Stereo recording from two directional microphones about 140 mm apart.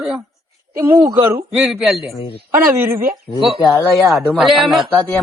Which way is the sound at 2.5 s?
20° right (ahead or behind).